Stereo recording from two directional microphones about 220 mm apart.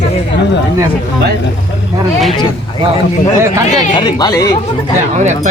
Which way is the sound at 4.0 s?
20° left (ahead or behind).